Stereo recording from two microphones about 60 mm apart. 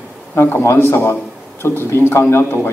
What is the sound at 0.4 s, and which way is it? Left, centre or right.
A man's voice, left.